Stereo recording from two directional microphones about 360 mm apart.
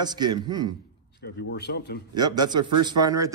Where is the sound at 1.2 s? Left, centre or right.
Left.